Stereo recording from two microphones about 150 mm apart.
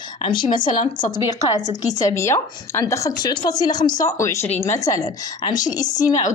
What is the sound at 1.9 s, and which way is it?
A woman's voice, 20° left (ahead or behind).